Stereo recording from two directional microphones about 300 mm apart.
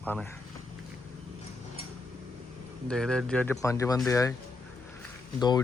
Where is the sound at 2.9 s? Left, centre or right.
Centre.